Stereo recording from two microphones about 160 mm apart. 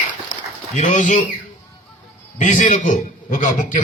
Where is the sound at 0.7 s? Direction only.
50° left (ahead or behind).